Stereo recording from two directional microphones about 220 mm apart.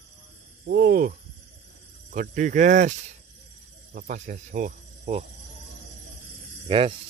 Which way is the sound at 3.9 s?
35° right (ahead or behind).